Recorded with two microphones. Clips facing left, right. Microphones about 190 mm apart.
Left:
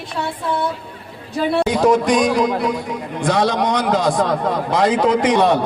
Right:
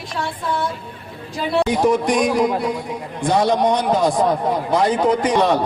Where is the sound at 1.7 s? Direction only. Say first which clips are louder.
Left 3 dB; 90° left.